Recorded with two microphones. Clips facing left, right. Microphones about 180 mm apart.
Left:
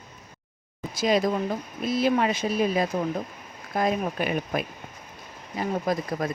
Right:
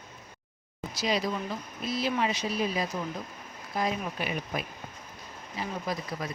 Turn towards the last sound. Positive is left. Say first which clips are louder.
# left 7 dB
turn(degrees=50)  # may be behind; listen again after turning